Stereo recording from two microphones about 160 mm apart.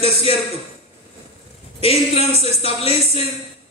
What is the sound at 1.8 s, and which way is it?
Speech, 40° left (ahead or behind).